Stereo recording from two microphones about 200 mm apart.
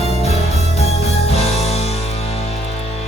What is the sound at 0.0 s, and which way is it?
Music, 30° left (ahead or behind).